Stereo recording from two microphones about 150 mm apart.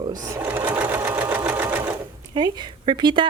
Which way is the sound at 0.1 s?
20° right (ahead or behind).